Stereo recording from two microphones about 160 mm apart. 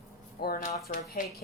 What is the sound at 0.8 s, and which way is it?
Speech, 70° left (ahead or behind).